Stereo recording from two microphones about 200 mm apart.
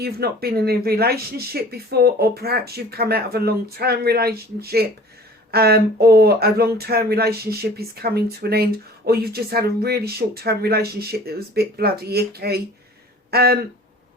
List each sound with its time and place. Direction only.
0.0 s speech: 50° right (ahead or behind)